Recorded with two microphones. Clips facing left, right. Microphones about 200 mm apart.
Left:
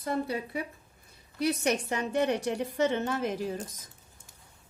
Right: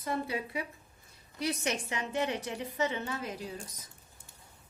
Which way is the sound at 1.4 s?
60° left (ahead or behind).